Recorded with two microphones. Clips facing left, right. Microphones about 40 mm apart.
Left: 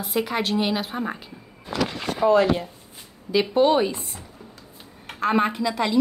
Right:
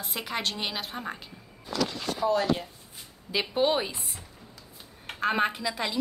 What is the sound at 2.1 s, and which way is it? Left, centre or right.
Speech, left.